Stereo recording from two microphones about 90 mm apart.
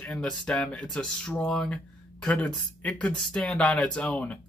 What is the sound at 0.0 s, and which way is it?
Speech, 10° left (ahead or behind).